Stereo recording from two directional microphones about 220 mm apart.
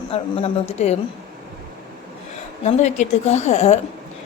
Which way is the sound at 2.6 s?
30° left (ahead or behind).